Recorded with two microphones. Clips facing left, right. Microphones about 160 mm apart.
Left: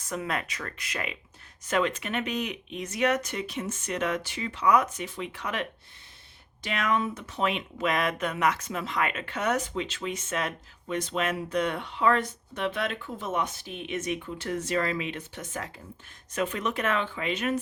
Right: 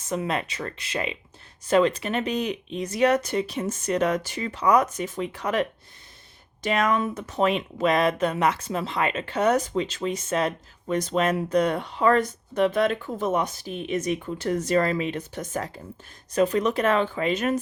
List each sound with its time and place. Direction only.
0.0 s speech: 25° right (ahead or behind); by 17.6 s 40° right (ahead or behind)